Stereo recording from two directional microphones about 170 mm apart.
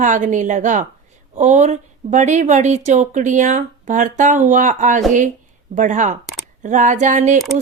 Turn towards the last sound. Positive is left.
turn(degrees=-45)  # may be behind; listen again after turning